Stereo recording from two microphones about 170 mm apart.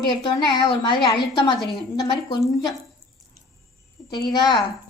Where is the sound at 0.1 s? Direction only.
25° left (ahead or behind).